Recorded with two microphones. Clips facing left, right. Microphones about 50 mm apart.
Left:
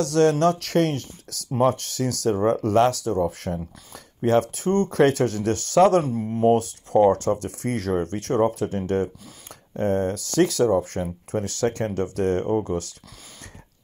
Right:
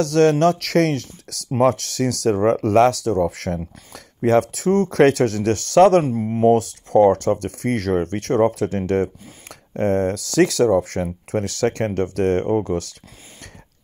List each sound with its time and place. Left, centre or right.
0.0 s speech: right
0.6 s speech: right
6.4 s speech: right